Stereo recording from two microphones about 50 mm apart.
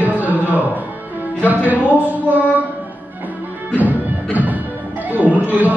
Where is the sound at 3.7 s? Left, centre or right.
Right.